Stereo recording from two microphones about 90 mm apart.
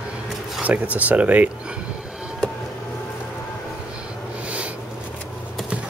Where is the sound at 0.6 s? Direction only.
15° right (ahead or behind).